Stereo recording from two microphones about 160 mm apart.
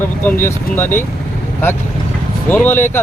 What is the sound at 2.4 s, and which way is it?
Speech, 10° left (ahead or behind).